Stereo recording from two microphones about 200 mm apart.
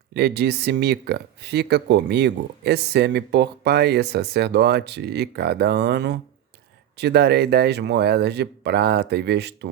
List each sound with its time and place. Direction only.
0.1 s speech: 55° right (ahead or behind)